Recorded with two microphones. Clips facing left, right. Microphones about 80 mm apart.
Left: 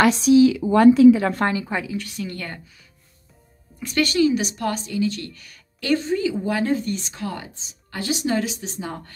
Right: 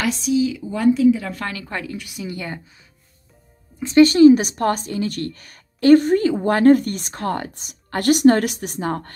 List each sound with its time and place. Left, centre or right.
0.0 s a woman's voice: left
1.5 s a woman's voice: centre
2.0 s a woman's voice: centre
3.8 s a woman's voice: right